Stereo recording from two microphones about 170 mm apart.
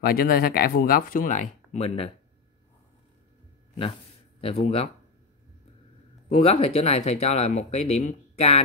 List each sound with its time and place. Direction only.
0.0 s speech: 60° left (ahead or behind); by 2.1 s 35° left (ahead or behind)
4.4 s speech: 35° left (ahead or behind)
6.2 s speech: 40° left (ahead or behind)